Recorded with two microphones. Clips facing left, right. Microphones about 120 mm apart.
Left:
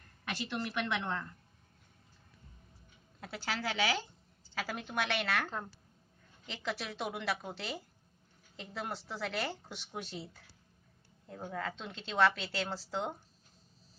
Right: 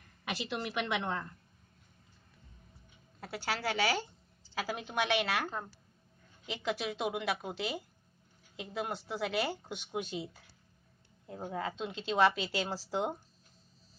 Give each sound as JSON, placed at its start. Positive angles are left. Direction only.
{"t": 0.2, "sound": "a woman's voice", "side_deg": -15}
{"t": 3.2, "sound": "a woman's voice", "side_deg": -5}
{"t": 11.2, "sound": "a woman's voice", "side_deg": -15}